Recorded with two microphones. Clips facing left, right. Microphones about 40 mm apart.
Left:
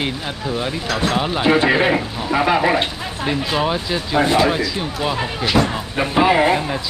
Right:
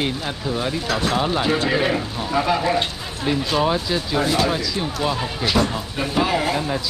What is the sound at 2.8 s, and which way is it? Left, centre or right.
Speech, centre.